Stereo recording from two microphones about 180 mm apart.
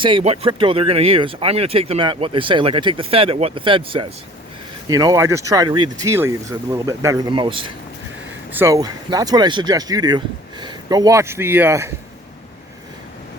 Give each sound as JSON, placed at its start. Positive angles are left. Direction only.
{"t": 0.0, "sound": "speech", "side_deg": -30}
{"t": 8.5, "sound": "speech", "side_deg": -15}